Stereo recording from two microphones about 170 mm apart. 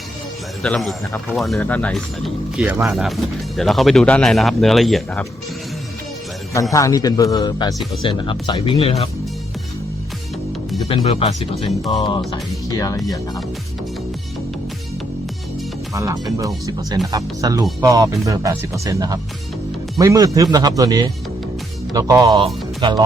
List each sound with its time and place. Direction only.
0.6 s speech: 5° left (ahead or behind)
6.5 s a man's voice: 20° left (ahead or behind); by 9.0 s 35° left (ahead or behind)
10.8 s speech: 35° left (ahead or behind)
12.3 s a man's voice: 20° left (ahead or behind)
16.0 s speech: 20° right (ahead or behind)